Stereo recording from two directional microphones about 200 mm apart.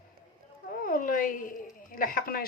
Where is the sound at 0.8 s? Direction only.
45° left (ahead or behind).